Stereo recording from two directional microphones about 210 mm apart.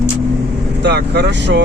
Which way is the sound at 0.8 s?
55° right (ahead or behind).